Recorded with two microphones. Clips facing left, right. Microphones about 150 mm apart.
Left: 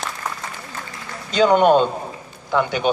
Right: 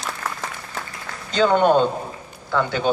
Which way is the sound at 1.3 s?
15° left (ahead or behind).